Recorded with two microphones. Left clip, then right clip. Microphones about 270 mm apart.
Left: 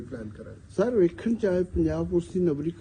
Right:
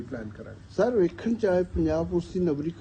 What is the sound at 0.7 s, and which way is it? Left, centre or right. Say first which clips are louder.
A man's voice: even; left.